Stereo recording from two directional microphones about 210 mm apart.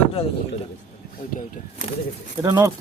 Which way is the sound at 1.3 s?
40° left (ahead or behind).